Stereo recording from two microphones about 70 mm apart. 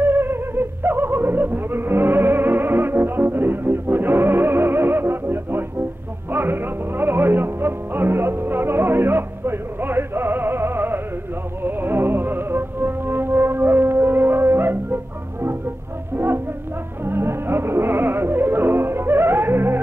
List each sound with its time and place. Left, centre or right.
0.0 s a sound: right
6.3 s music: right
17.0 s music: right